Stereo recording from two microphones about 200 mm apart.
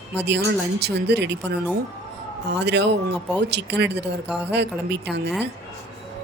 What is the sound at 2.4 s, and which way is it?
Speech, 60° right (ahead or behind).